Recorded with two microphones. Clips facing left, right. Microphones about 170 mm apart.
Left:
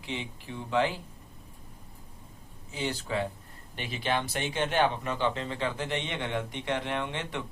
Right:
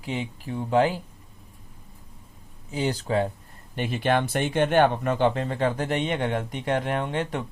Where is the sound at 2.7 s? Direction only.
40° right (ahead or behind).